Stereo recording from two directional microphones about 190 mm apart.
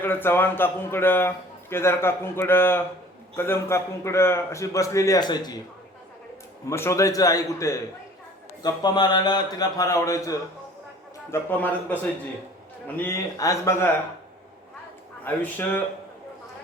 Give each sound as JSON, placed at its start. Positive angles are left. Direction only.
{"t": 0.0, "sound": "a man's voice", "side_deg": 10}
{"t": 6.7, "sound": "a man's voice", "side_deg": 15}
{"t": 13.0, "sound": "a man's voice", "side_deg": 15}
{"t": 15.2, "sound": "a man's voice", "side_deg": 10}